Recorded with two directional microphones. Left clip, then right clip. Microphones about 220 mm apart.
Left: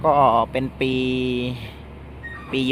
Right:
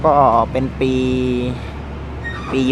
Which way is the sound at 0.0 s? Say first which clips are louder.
Right 4 dB; centre (ahead or behind).